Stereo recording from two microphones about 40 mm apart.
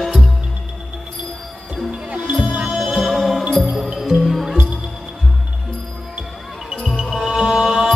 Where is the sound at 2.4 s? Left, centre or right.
Right.